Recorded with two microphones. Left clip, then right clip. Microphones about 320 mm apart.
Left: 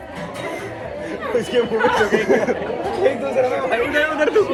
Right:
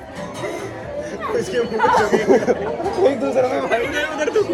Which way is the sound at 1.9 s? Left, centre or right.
Right.